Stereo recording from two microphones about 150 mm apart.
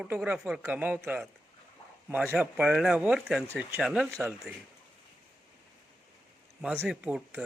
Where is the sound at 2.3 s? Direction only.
5° right (ahead or behind).